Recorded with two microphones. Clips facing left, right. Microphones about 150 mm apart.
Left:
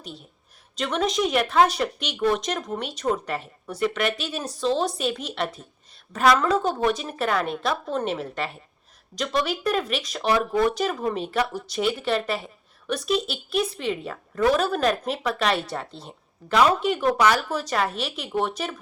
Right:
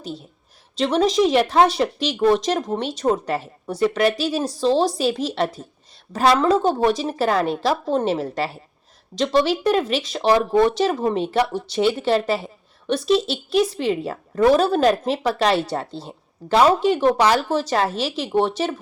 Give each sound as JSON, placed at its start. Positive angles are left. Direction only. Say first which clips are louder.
{"t": 0.0, "sound": "a woman's voice", "louder": "right 8 dB", "side_deg": -35}